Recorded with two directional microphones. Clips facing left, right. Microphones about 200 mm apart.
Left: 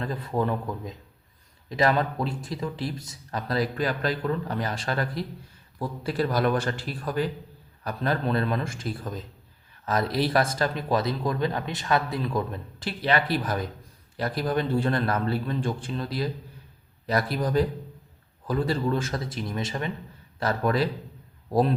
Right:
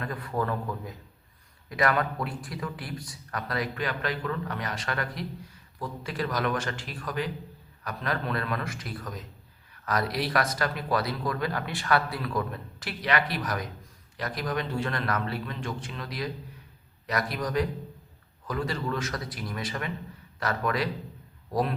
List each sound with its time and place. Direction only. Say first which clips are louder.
0.0 s a man's voice: left 3 dB; 25° left (ahead or behind)
17.3 s a man's voice: left 4 dB; 30° left (ahead or behind)